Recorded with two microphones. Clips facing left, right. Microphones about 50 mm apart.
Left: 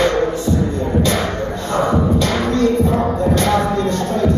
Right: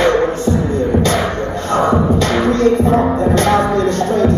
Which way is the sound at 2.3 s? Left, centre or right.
Right.